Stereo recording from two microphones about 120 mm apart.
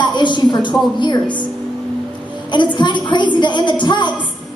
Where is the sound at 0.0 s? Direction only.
40° left (ahead or behind).